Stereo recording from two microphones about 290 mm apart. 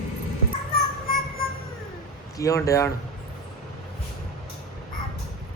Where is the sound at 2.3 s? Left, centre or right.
Centre.